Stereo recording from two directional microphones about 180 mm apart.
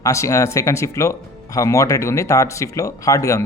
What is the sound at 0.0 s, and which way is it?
Speech, 15° left (ahead or behind).